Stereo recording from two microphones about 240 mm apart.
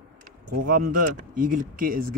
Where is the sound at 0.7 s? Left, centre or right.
Right.